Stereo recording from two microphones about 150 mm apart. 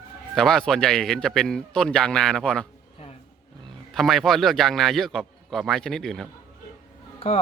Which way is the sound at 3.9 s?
Centre (ahead or behind).